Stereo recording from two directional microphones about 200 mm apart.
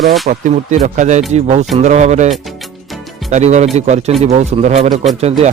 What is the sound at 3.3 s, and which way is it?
Speech, 35° right (ahead or behind).